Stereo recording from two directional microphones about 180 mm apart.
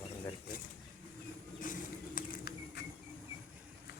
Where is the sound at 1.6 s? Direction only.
50° left (ahead or behind).